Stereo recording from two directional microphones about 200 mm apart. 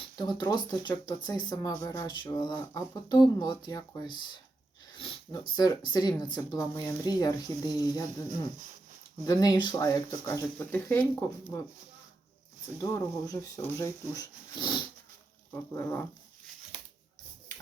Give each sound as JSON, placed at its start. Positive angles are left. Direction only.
{"t": 0.2, "sound": "speech", "side_deg": 20}
{"t": 4.9, "sound": "a sound", "side_deg": 25}
{"t": 5.5, "sound": "speech", "side_deg": 20}
{"t": 9.2, "sound": "speech", "side_deg": 20}
{"t": 12.8, "sound": "speech", "side_deg": 15}
{"t": 15.5, "sound": "speech", "side_deg": 10}